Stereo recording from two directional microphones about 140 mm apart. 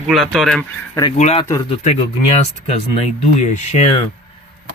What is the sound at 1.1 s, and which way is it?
Speech, 50° left (ahead or behind).